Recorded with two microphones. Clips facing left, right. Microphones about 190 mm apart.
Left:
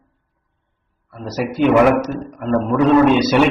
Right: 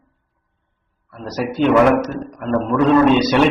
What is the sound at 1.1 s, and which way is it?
A man's voice, 10° left (ahead or behind).